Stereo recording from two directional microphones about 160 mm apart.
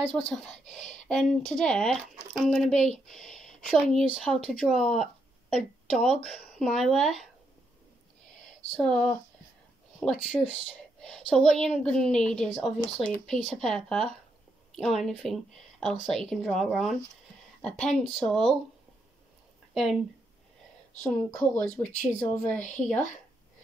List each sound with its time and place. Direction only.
0.1 s speech: 5° left (ahead or behind)
8.7 s speech: 5° left (ahead or behind)
19.7 s speech: centre (ahead or behind)
21.0 s speech: 10° left (ahead or behind)
22.6 s a woman's voice: 50° left (ahead or behind)